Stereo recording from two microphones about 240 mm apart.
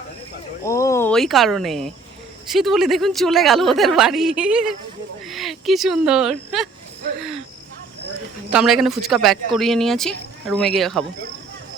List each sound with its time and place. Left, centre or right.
0.6 s speech: centre
8.5 s speech: centre